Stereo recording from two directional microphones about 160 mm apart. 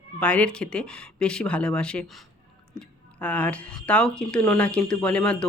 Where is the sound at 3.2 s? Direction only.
10° left (ahead or behind).